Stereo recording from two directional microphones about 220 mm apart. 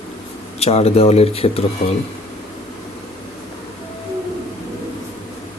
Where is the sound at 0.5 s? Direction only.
30° left (ahead or behind).